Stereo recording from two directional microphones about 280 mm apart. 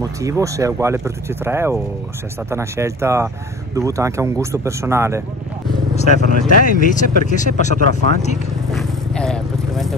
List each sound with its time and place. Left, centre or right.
0.0 s speech: centre
5.9 s speech: left
8.7 s vehicle: centre